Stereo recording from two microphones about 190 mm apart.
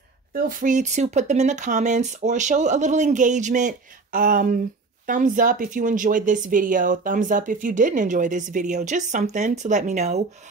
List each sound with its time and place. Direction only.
0.5 s speech: 45° right (ahead or behind)